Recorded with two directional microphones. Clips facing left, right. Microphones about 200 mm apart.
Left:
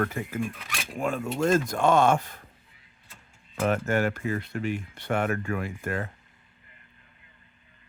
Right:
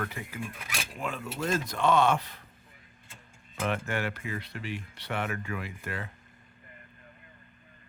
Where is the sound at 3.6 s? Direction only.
45° left (ahead or behind).